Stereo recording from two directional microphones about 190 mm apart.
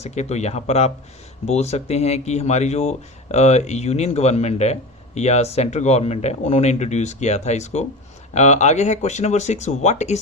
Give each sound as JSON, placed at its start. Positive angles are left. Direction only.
{"t": 0.0, "sound": "speech", "side_deg": 35}